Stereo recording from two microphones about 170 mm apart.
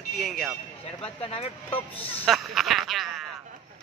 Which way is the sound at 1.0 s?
35° left (ahead or behind).